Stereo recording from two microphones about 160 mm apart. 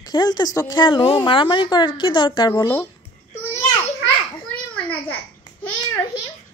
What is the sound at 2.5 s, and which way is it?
Speech, 20° left (ahead or behind).